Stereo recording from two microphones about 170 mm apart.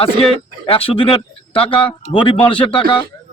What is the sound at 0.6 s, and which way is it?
A man's voice, 35° left (ahead or behind).